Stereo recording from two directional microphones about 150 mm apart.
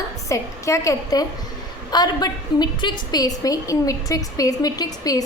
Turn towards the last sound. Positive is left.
turn(degrees=25)  # may be behind; listen again after turning